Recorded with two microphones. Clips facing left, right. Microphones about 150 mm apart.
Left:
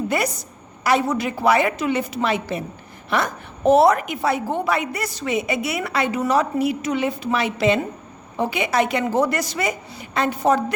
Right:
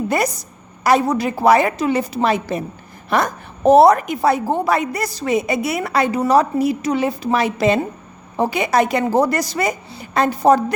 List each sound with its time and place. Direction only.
0.1 s a woman's voice: 40° right (ahead or behind)